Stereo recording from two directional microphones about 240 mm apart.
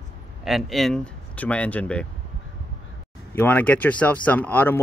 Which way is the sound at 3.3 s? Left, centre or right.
Centre.